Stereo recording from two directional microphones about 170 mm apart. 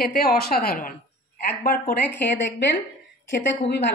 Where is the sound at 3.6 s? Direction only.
85° left.